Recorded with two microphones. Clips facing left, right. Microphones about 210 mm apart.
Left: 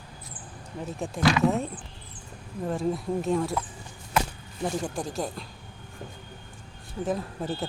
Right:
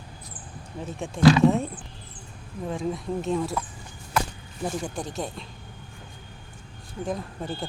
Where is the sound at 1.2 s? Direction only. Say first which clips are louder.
Right 6 dB; 30° right (ahead or behind).